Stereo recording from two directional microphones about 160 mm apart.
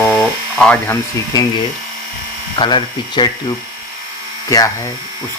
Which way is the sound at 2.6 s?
30° left (ahead or behind).